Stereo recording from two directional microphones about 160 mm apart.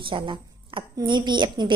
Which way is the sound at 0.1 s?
30° right (ahead or behind).